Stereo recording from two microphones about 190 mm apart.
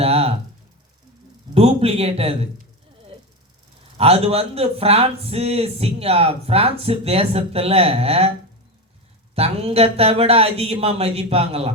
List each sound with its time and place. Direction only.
0.0 s a sound: 30° right (ahead or behind)
1.5 s a man's voice: 30° right (ahead or behind)
3.9 s a man's voice: 30° right (ahead or behind)
9.3 s a man's voice: 30° right (ahead or behind)